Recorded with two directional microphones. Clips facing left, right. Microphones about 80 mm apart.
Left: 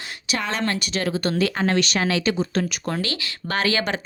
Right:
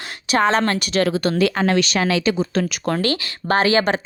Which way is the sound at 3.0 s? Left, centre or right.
Right.